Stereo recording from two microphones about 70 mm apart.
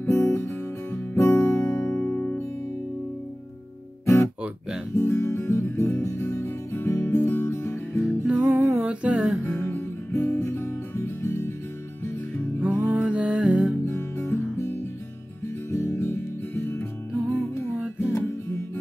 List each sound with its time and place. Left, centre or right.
0.0 s music: left
4.0 s guitar: left
4.9 s music: left
8.3 s music: right
8.8 s humming: centre
9.4 s music: left
10.1 s guitar: left
12.6 s music: right
13.8 s guitar: left
15.4 s music: left
17.7 s music: centre